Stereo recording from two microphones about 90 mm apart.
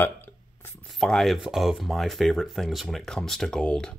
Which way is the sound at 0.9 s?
5° left (ahead or behind).